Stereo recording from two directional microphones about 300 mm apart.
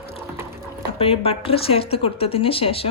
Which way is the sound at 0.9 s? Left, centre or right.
Centre.